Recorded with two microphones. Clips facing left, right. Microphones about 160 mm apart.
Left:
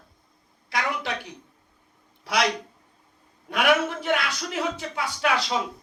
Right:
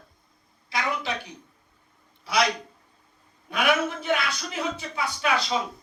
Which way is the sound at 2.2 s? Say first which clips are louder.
Right 1 dB; 70° left (ahead or behind).